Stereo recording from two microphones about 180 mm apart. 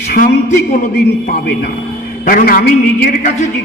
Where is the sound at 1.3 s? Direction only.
55° left (ahead or behind).